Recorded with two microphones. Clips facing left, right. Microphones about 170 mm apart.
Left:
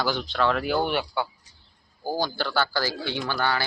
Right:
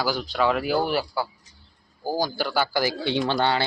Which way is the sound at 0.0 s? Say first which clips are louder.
Right 1 dB; 5° right (ahead or behind).